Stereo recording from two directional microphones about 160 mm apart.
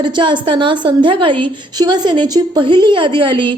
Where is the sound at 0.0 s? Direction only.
30° right (ahead or behind).